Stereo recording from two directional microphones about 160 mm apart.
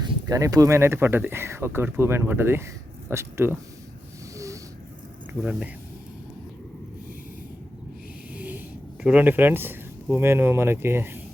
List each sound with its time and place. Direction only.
0.0 s speech: 25° right (ahead or behind)
4.4 s a sound: 20° right (ahead or behind)
5.4 s speech: 10° right (ahead or behind)
8.4 s wheeze: 10° right (ahead or behind)
9.0 s speech: 10° right (ahead or behind)